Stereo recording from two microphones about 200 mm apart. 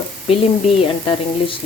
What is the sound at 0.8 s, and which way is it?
Sizzle, 25° left (ahead or behind).